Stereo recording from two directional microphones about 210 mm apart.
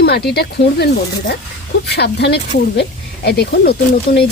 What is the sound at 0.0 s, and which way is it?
Speech, 50° left (ahead or behind).